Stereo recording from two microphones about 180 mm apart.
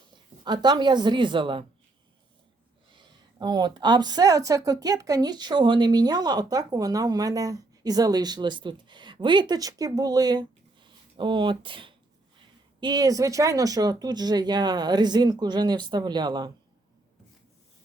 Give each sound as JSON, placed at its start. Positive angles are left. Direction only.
{"t": 0.4, "sound": "a woman's voice", "side_deg": -25}
{"t": 2.9, "sound": "a woman's voice", "side_deg": -25}